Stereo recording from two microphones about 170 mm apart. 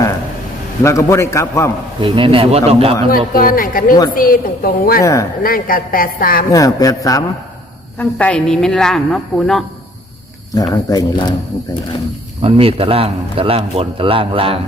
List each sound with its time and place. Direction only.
0.8 s a man's voice: 15° left (ahead or behind)
2.0 s a man's voice: 30° right (ahead or behind)
3.3 s a woman's voice: 55° left (ahead or behind)
6.5 s speech: 20° left (ahead or behind)
7.9 s a woman's voice: 5° left (ahead or behind)
10.5 s speech: 20° left (ahead or behind)
12.4 s a man's voice: 35° right (ahead or behind)